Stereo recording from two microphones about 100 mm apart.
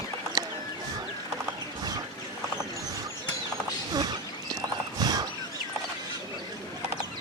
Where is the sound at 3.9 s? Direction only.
40° right (ahead or behind).